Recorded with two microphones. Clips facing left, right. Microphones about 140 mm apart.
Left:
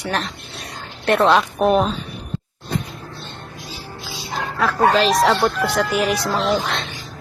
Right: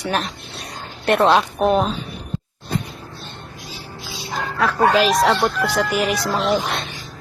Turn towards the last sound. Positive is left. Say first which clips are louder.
# even
turn(degrees=-5)  # may be behind; listen again after turning